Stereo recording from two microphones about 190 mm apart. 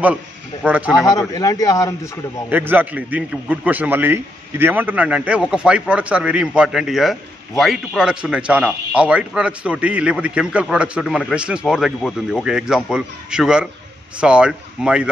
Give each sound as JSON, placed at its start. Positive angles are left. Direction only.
{"t": 0.7, "sound": "speech", "side_deg": -5}
{"t": 1.0, "sound": "a man's voice", "side_deg": 20}
{"t": 2.5, "sound": "a man's voice", "side_deg": -10}